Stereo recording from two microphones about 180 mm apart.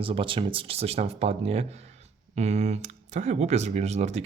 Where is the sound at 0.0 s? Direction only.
30° right (ahead or behind).